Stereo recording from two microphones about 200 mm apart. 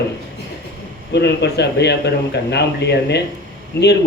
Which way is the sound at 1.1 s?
55° left (ahead or behind).